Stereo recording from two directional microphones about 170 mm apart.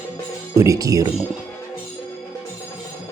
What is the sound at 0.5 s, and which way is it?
Speech, 20° right (ahead or behind).